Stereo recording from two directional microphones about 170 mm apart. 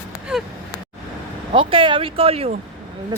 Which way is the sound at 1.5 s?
30° right (ahead or behind).